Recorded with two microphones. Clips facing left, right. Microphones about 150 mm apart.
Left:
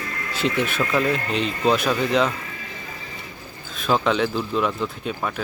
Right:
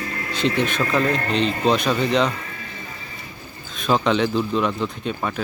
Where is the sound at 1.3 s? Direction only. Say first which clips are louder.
Right 2 dB; 5° left (ahead or behind).